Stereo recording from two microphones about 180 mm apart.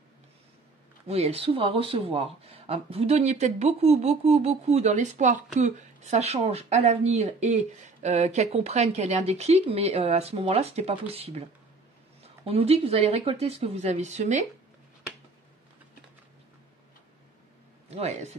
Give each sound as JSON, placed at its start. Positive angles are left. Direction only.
{"t": 1.0, "sound": "speech", "side_deg": -35}
{"t": 17.8, "sound": "speech", "side_deg": -35}